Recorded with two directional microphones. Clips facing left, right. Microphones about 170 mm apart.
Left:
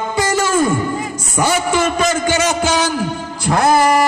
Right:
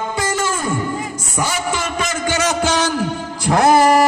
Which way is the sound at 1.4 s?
60° left (ahead or behind).